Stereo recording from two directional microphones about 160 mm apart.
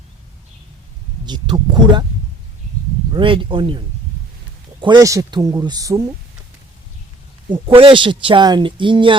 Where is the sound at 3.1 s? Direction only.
30° right (ahead or behind).